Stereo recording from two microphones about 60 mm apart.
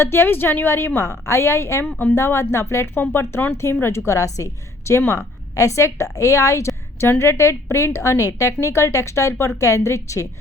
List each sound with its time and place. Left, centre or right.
0.0 s speech: left
0.9 s a woman's voice: left
4.9 s a woman's voice: left